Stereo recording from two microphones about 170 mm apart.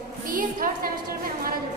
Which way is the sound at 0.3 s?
55° right (ahead or behind).